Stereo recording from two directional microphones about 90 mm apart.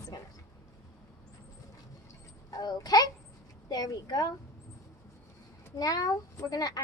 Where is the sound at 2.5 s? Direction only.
45° left (ahead or behind).